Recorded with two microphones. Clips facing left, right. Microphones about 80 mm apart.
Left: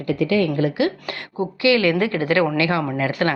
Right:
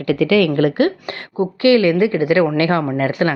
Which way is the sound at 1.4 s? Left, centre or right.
Right.